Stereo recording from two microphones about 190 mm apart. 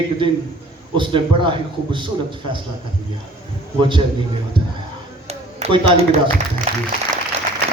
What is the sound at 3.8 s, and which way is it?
Speech, 25° right (ahead or behind).